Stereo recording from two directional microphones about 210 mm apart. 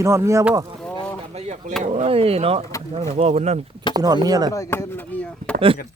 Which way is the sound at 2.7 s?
15° left (ahead or behind).